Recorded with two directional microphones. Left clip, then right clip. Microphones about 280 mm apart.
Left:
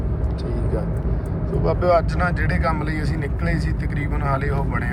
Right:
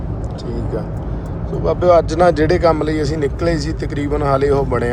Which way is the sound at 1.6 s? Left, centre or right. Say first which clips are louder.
Right 6 dB; centre.